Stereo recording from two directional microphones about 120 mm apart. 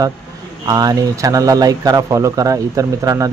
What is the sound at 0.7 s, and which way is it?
A man's voice, 30° right (ahead or behind).